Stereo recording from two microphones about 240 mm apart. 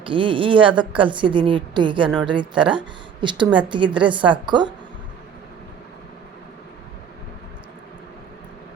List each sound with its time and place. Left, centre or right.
0.0 s a woman's voice: right